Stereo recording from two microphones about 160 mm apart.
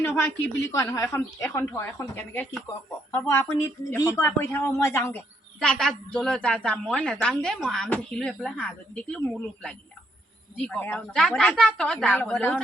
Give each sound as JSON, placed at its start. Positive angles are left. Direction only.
{"t": 0.2, "sound": "speech", "side_deg": 20}
{"t": 5.5, "sound": "a woman's voice", "side_deg": 5}